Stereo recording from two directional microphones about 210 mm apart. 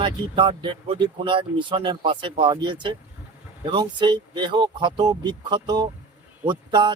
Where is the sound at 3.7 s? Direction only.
20° right (ahead or behind).